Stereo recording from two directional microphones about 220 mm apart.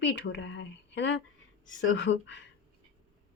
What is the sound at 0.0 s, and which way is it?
Speech, 55° left (ahead or behind).